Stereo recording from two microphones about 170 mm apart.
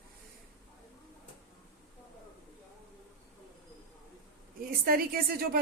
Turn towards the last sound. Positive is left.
turn(degrees=-60)  # may be behind; listen again after turning